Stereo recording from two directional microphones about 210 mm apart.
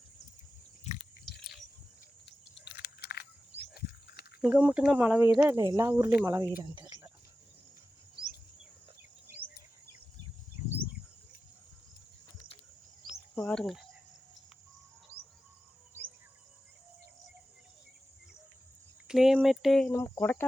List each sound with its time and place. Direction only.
2.2 s a sound: 55° left (ahead or behind)
4.4 s speech: 5° right (ahead or behind)
13.3 s speech: 5° left (ahead or behind)
19.0 s speech: centre (ahead or behind)
19.9 s speech: 15° left (ahead or behind)